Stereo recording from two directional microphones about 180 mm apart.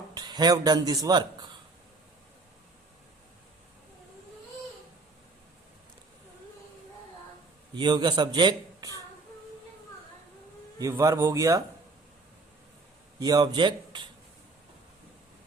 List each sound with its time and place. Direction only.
0.1 s a man's voice: 25° right (ahead or behind)
7.8 s a man's voice: 25° right (ahead or behind)
10.8 s a man's voice: 20° right (ahead or behind)
13.1 s a man's voice: 20° right (ahead or behind)